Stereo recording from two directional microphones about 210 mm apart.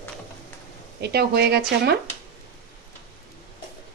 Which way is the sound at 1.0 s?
50° right (ahead or behind).